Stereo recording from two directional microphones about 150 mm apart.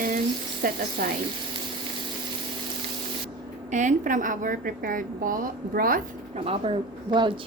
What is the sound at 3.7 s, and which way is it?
A woman's voice, 55° right (ahead or behind).